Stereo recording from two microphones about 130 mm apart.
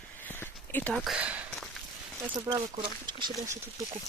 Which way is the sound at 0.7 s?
10° left (ahead or behind).